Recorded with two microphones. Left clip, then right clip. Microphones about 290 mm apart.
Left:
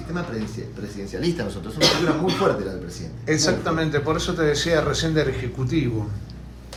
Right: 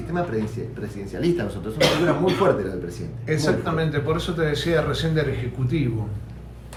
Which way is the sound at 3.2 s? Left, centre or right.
Left.